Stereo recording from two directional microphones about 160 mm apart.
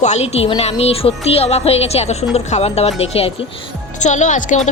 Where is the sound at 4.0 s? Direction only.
50° left (ahead or behind).